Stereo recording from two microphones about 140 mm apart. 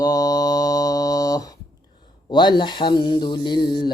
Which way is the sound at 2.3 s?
35° left (ahead or behind).